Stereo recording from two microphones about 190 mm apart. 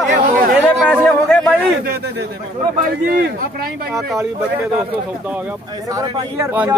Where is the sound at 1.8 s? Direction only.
60° right (ahead or behind).